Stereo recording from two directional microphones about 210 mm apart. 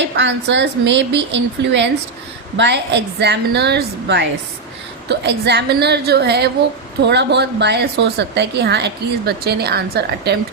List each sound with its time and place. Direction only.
0.0 s a woman's voice: 55° right (ahead or behind)